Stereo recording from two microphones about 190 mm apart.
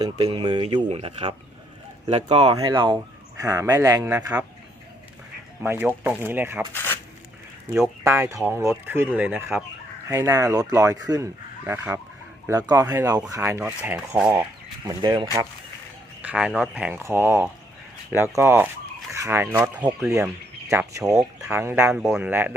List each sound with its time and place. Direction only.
0.3 s speech: 25° right (ahead or behind)
6.0 s speech: 10° right (ahead or behind)
6.7 s a sound: 10° left (ahead or behind)
8.0 s speech: 15° right (ahead or behind)
11.6 s speech: 10° right (ahead or behind)
14.8 s speech: 25° right (ahead or behind)
16.2 s speech: 5° right (ahead or behind)